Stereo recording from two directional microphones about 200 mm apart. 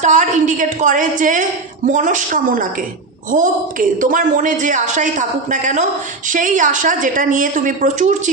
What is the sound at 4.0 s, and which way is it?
A woman's voice, 40° right (ahead or behind).